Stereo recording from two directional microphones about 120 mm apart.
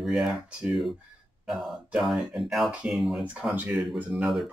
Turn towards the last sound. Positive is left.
turn(degrees=-10)  # may be behind; listen again after turning